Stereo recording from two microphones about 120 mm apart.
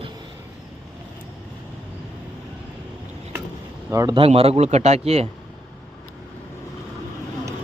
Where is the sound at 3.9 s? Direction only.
25° right (ahead or behind).